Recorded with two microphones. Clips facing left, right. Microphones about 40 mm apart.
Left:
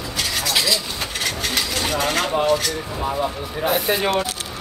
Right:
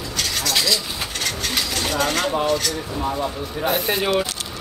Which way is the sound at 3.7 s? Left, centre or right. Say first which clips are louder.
Left 1 dB; centre.